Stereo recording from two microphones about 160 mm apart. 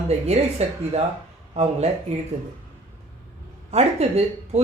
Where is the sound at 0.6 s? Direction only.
40° right (ahead or behind).